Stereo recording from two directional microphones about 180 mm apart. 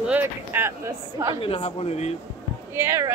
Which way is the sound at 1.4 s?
30° left (ahead or behind).